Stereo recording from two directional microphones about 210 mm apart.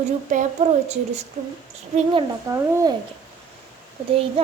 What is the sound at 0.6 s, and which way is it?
Speech, 35° right (ahead or behind).